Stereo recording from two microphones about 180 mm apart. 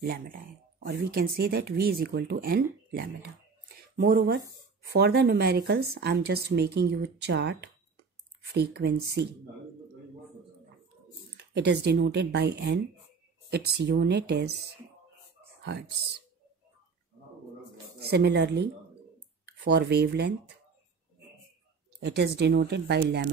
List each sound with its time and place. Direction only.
0.0 s speech: 50° right (ahead or behind)
2.9 s a sound: 60° right (ahead or behind)
4.9 s speech: 65° right (ahead or behind)
11.3 s speech: 70° right (ahead or behind)
18.1 s speech: 70° right (ahead or behind)
22.0 s speech: 65° right (ahead or behind)